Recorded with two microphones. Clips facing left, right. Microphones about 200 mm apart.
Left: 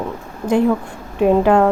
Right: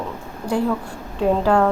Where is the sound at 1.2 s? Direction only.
20° left (ahead or behind).